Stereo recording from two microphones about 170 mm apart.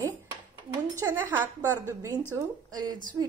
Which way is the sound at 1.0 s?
15° right (ahead or behind).